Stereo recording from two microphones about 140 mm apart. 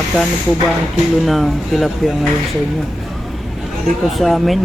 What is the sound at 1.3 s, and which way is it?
Speech, centre (ahead or behind).